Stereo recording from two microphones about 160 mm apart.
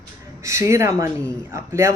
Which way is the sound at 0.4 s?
20° right (ahead or behind).